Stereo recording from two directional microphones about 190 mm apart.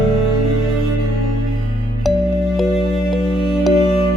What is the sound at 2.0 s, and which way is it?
Music, centre (ahead or behind).